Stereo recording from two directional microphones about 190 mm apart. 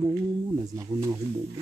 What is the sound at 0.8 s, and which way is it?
Speech, 15° right (ahead or behind).